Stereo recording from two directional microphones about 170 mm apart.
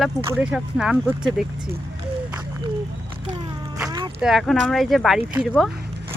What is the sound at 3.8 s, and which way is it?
Boat, 25° right (ahead or behind).